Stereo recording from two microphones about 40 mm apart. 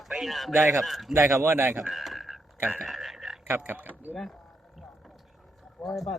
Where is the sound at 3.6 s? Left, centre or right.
Right.